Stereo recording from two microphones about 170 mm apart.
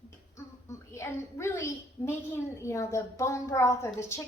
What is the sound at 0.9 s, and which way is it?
A woman's voice, 15° left (ahead or behind).